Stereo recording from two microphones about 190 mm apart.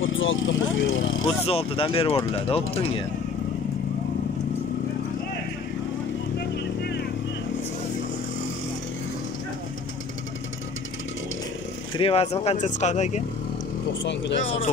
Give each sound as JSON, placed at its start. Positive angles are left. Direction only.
{"t": 0.0, "sound": "speech", "side_deg": 90}
{"t": 1.2, "sound": "speech", "side_deg": 30}
{"t": 6.5, "sound": "vehicle", "side_deg": 60}
{"t": 11.9, "sound": "speech", "side_deg": 30}
{"t": 14.0, "sound": "speech", "side_deg": 70}